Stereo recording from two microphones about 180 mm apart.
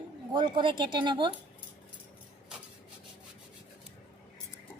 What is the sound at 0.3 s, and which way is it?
Speech, 25° right (ahead or behind).